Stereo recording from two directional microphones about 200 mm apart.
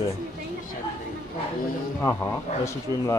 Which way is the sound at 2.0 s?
15° left (ahead or behind).